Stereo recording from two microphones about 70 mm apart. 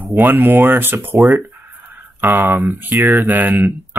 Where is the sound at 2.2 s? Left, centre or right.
Right.